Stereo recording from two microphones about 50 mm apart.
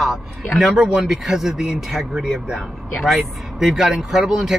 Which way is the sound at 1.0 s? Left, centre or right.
Centre.